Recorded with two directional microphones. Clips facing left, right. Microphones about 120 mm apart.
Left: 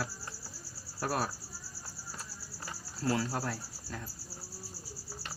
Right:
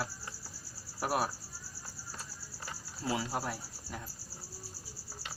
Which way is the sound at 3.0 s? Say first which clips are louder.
Left 2 dB; 10° right (ahead or behind).